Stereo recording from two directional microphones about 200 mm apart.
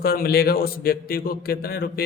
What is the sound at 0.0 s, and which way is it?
A man's voice, 50° left (ahead or behind).